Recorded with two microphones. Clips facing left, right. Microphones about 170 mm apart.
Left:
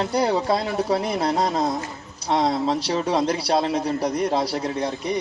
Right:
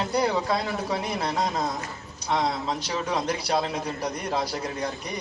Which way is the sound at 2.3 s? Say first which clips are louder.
Left 5 dB; 35° left (ahead or behind).